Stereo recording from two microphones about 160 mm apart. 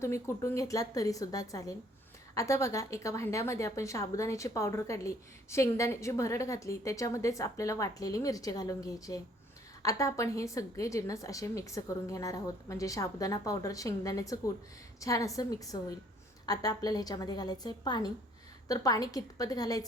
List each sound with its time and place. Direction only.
0.0 s a woman's voice: 15° left (ahead or behind)